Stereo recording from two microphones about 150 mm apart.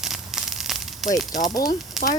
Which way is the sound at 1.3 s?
55° left (ahead or behind).